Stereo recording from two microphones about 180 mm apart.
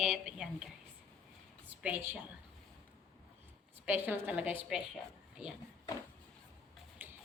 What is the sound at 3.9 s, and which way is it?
Speech, 10° right (ahead or behind).